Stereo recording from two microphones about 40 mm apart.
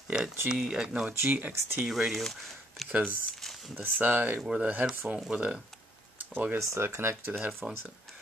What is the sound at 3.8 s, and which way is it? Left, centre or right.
Speech, right.